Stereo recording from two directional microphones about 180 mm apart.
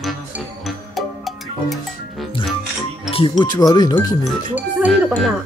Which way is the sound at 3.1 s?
25° left (ahead or behind).